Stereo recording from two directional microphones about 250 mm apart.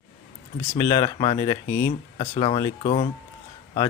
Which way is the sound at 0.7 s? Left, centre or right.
Centre.